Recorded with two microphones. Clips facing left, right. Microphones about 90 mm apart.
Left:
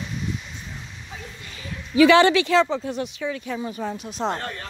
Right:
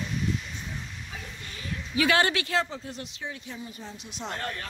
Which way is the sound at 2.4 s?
90° left.